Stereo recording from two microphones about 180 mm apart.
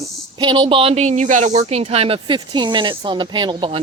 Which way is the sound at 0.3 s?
25° right (ahead or behind).